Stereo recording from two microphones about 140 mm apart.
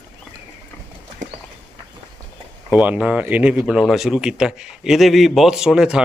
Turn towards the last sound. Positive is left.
turn(degrees=-5)  # may be behind; listen again after turning